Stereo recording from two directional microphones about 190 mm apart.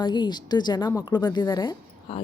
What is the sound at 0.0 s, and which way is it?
Speech, 25° left (ahead or behind).